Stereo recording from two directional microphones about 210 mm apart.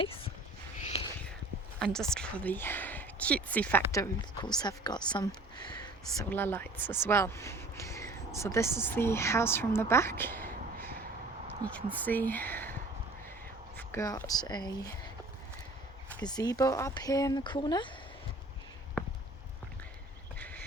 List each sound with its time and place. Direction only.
0.0 s speech: 25° left (ahead or behind)
0.8 s a sound: 30° left (ahead or behind)
1.8 s speech: 5° left (ahead or behind); by 5.9 s 20° left (ahead or behind)
6.3 s speech: 10° left (ahead or behind)
12.0 s speech: 10° left (ahead or behind)
13.7 s speech: 15° left (ahead or behind)
16.2 s speech: 20° left (ahead or behind)
20.4 s a sound: 5° left (ahead or behind)